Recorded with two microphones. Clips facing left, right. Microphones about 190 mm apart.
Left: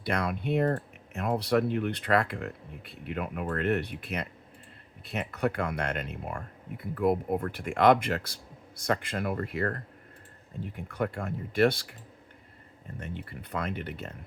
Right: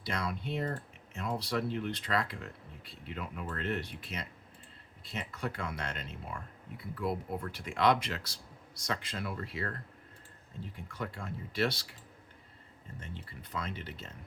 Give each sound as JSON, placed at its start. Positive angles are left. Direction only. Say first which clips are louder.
{"t": 0.0, "sound": "speech", "louder": "left 6 dB", "side_deg": 60}
{"t": 10.9, "sound": "speech", "louder": "left 9 dB", "side_deg": 55}
{"t": 13.0, "sound": "speech", "louder": "left 8 dB", "side_deg": 60}